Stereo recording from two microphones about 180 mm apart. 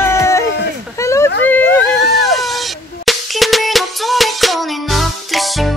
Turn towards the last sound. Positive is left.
turn(degrees=0)  # may be behind; listen again after turning